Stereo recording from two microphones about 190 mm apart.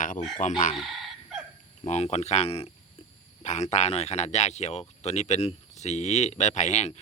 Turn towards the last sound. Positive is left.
turn(degrees=35)  # may be behind; listen again after turning